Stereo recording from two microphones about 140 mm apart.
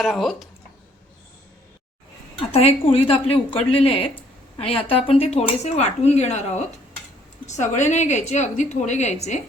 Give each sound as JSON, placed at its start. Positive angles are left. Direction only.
{"t": 0.0, "sound": "speech", "side_deg": 0}
{"t": 2.4, "sound": "a woman's voice", "side_deg": 45}